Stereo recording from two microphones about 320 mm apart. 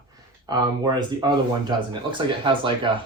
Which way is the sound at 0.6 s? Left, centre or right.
Centre.